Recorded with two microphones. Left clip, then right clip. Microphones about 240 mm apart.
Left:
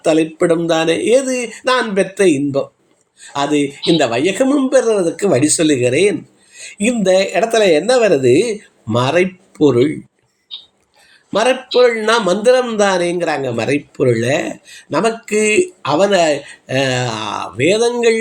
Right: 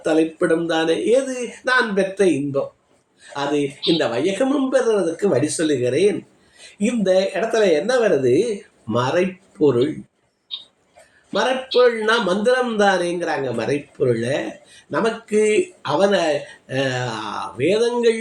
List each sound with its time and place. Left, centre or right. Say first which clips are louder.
0.0 s a man's voice: left 5 dB; left
11.3 s a man's voice: left 6 dB; left